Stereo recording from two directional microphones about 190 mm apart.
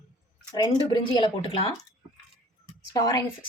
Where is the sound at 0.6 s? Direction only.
25° left (ahead or behind).